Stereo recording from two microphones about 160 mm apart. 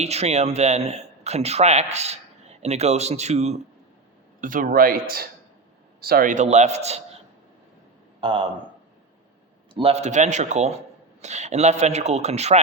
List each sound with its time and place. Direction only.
0.0 s speech: 40° right (ahead or behind)
4.4 s speech: 55° right (ahead or behind)
8.2 s a man's voice: 30° right (ahead or behind)
9.7 s speech: 40° right (ahead or behind)